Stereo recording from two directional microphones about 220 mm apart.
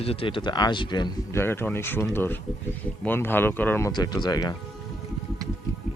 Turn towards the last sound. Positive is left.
turn(degrees=20)  # may be behind; listen again after turning